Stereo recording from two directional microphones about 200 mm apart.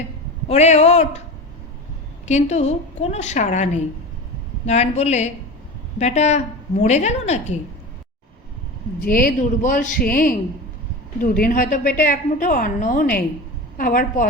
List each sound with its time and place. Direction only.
0.4 s a woman's voice: 35° left (ahead or behind)
2.2 s a woman's voice: 35° left (ahead or behind)
9.0 s a woman's voice: 45° left (ahead or behind)